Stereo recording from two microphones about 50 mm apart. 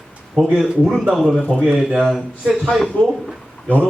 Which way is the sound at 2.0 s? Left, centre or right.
Centre.